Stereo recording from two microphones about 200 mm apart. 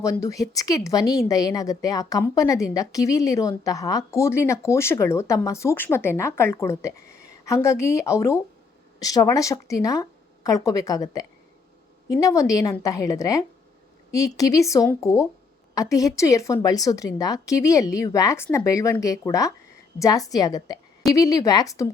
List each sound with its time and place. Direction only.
0.0 s a woman's voice: 15° left (ahead or behind)